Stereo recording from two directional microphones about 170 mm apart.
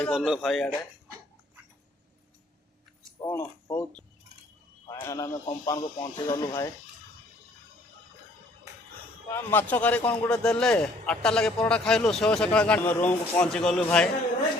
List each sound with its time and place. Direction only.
0.0 s a man's voice: 5° left (ahead or behind)
3.2 s speech: 15° left (ahead or behind)
9.3 s a man's voice: 10° left (ahead or behind)